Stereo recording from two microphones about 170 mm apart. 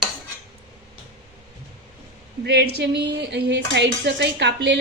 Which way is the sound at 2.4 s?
80° right.